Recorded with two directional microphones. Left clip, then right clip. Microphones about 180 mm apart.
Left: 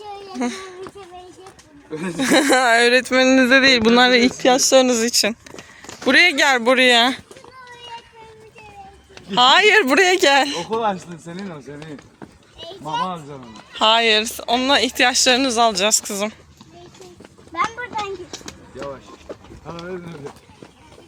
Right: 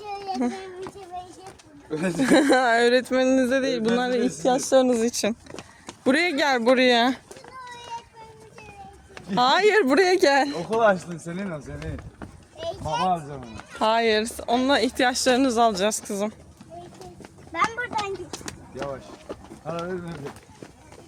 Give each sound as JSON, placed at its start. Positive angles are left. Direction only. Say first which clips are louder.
{"t": 0.3, "sound": "speech", "louder": "left 6 dB", "side_deg": -5}
{"t": 1.9, "sound": "speech", "louder": "right 1 dB", "side_deg": -50}
{"t": 2.1, "sound": "speech", "louder": "left 3 dB", "side_deg": -5}
{"t": 3.2, "sound": "speech", "louder": "left 8 dB", "side_deg": 15}
{"t": 4.9, "sound": "speech", "louder": "left 6 dB", "side_deg": 0}
{"t": 9.3, "sound": "speech", "louder": "left 6 dB", "side_deg": -5}
{"t": 12.5, "sound": "speech", "louder": "left 2 dB", "side_deg": -15}
{"t": 17.5, "sound": "a sound", "louder": "left 2 dB", "side_deg": -5}